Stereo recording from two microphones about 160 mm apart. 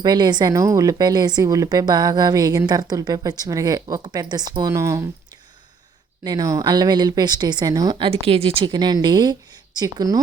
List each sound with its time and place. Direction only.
0.0 s speech: 25° right (ahead or behind)
6.2 s speech: 25° right (ahead or behind)